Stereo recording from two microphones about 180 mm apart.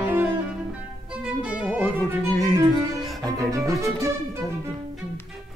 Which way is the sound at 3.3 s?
20° right (ahead or behind).